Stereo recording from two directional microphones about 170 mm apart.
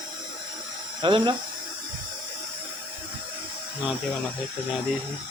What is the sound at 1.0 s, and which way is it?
Speech, 30° right (ahead or behind).